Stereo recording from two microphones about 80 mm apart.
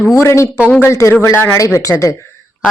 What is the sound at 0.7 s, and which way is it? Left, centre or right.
Speech, left.